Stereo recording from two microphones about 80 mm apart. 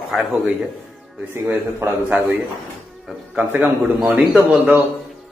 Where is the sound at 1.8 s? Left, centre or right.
Right.